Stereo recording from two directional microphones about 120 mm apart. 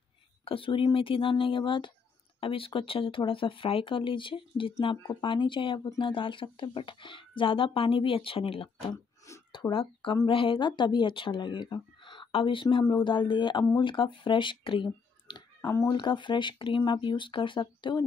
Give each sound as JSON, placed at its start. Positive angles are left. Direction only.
{"t": 0.5, "sound": "speech", "side_deg": 45}
{"t": 15.2, "sound": "a sound", "side_deg": 40}
{"t": 15.7, "sound": "speech", "side_deg": 25}
{"t": 16.0, "sound": "speech", "side_deg": 40}